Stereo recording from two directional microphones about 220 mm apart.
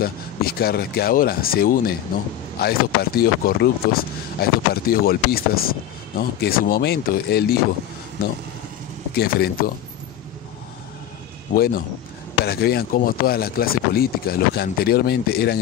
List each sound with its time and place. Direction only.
0.0 s speech: 45° left (ahead or behind)
9.1 s speech: 45° left (ahead or behind)
11.5 s speech: 40° left (ahead or behind)